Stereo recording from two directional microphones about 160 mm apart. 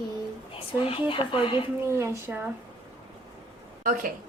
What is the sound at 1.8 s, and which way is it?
Speech, 15° right (ahead or behind).